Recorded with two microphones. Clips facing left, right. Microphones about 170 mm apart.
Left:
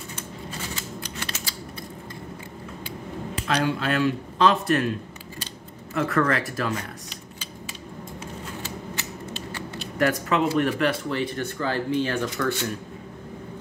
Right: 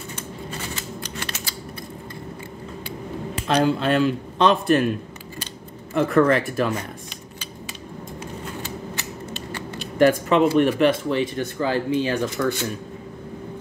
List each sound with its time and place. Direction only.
3.4 s speech: 25° right (ahead or behind)
5.9 s speech: 25° right (ahead or behind)
10.0 s speech: 20° right (ahead or behind)